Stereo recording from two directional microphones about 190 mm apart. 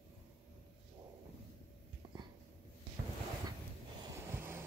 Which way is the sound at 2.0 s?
20° right (ahead or behind).